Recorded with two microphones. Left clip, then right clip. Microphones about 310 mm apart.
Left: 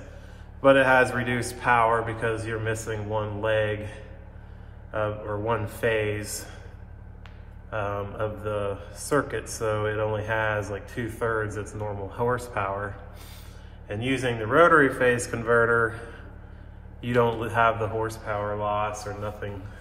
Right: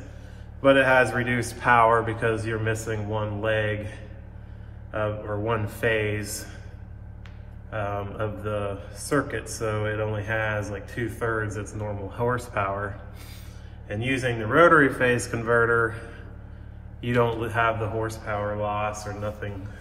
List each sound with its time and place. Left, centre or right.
0.6 s a man's voice: centre
7.7 s a man's voice: centre